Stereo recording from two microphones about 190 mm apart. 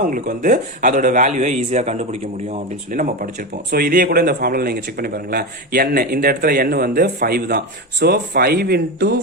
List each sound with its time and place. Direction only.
0.1 s a man's voice: 45° right (ahead or behind)